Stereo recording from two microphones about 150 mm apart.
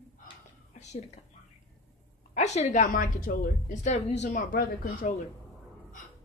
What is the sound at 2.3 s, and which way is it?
A woman's voice, 50° left (ahead or behind).